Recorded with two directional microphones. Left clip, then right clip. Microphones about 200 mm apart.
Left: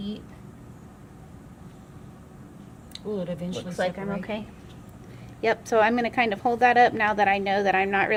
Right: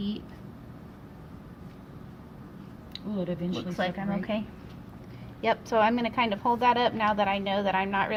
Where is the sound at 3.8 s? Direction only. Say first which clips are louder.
Left 4 dB; 30° left (ahead or behind).